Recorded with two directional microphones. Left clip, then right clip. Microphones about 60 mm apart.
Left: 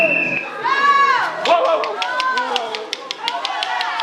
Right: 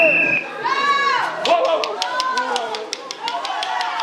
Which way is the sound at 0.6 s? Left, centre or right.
Right.